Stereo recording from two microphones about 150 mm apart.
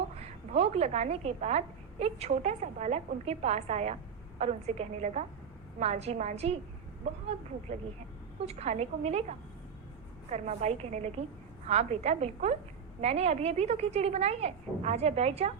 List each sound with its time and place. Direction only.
0.2 s a woman's voice: 45° right (ahead or behind)
8.4 s a woman's voice: 45° right (ahead or behind)
10.2 s a woman's voice: 50° right (ahead or behind)